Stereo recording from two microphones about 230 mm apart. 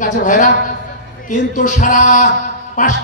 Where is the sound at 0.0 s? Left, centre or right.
Left.